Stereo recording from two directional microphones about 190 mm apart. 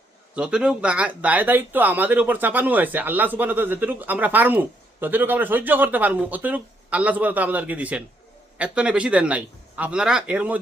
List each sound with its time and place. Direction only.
0.3 s a man's voice: 5° right (ahead or behind)